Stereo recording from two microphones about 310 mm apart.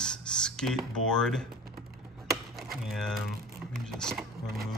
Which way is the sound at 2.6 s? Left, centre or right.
Centre.